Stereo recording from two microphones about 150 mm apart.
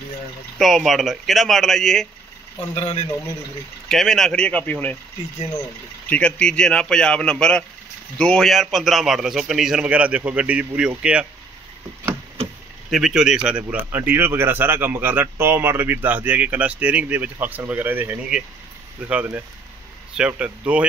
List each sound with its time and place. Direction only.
0.6 s a man's voice: centre (ahead or behind)
2.7 s a man's voice: 40° left (ahead or behind)
3.9 s speech: centre (ahead or behind)
6.0 s a man's voice: 10° left (ahead or behind); by 11.2 s 10° right (ahead or behind)
12.9 s speech: 5° right (ahead or behind)